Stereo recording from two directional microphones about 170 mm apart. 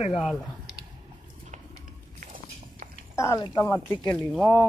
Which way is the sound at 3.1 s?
20° left (ahead or behind).